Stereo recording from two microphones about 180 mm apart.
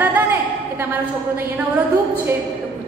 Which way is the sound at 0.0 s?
10° right (ahead or behind).